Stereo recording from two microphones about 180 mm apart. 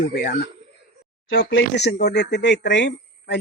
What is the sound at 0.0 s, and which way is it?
Speech, 65° left (ahead or behind).